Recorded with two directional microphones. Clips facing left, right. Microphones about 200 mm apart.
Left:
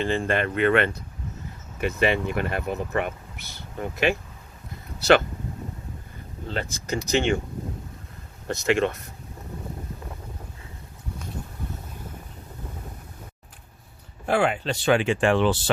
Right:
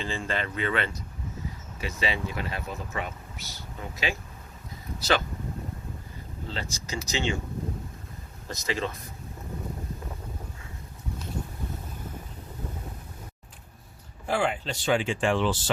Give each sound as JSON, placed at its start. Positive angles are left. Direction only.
{"t": 0.3, "sound": "speech", "side_deg": 60}
{"t": 6.5, "sound": "speech", "side_deg": 55}
{"t": 8.4, "sound": "speech", "side_deg": 65}
{"t": 14.3, "sound": "speech", "side_deg": 65}